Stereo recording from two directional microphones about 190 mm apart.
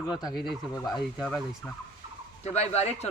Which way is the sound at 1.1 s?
5° left (ahead or behind).